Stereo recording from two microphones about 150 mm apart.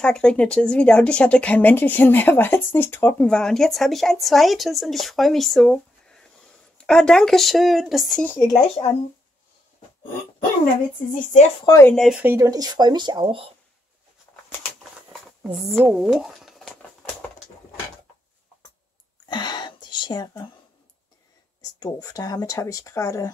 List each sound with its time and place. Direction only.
0.0 s speech: 5° left (ahead or behind)
8.3 s speech: 20° left (ahead or behind)
11.6 s speech: 20° left (ahead or behind)
11.9 s speech: centre (ahead or behind)
12.2 s speech: 15° right (ahead or behind); by 13.5 s 35° right (ahead or behind)
15.8 s speech: 5° right (ahead or behind)
19.2 s a sound: 30° left (ahead or behind)
21.5 s speech: 25° left (ahead or behind)